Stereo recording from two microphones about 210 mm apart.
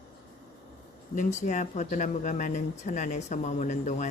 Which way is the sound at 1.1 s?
35° left (ahead or behind).